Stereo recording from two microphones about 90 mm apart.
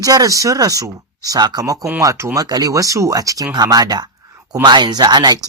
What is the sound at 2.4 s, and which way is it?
Speech, 45° right (ahead or behind).